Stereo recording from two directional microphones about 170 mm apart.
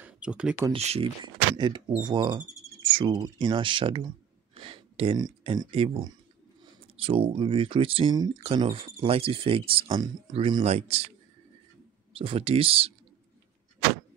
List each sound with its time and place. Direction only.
0.0 s speech: 5° right (ahead or behind)
0.7 s speech: 35° right (ahead or behind)
12.1 s speech: 30° right (ahead or behind)